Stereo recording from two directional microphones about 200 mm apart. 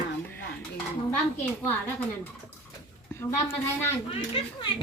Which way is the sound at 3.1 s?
15° left (ahead or behind).